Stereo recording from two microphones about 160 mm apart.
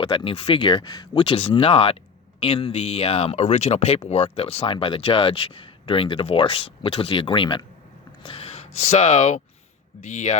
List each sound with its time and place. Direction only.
0.0 s speech: 35° left (ahead or behind)